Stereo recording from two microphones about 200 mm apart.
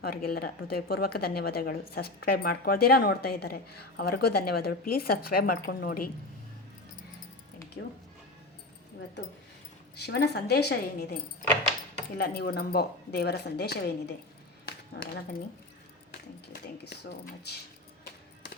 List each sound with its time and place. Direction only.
0.0 s speech: 50° left (ahead or behind)
9.9 s speech: 55° left (ahead or behind)
16.5 s speech: 55° left (ahead or behind)